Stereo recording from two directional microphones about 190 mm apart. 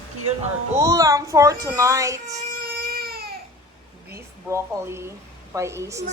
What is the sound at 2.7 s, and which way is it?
Baby cry, 55° right (ahead or behind).